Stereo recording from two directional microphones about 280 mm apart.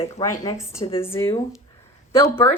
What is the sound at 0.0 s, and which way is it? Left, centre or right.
Speech, centre.